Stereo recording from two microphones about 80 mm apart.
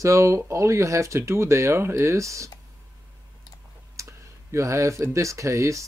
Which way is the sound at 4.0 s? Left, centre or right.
Right.